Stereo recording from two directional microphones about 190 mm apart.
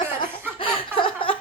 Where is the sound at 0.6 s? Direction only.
25° left (ahead or behind).